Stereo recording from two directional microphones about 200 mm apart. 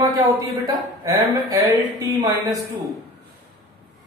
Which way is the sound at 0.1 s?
20° right (ahead or behind).